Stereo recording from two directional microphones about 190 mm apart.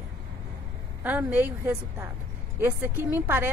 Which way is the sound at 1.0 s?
10° right (ahead or behind).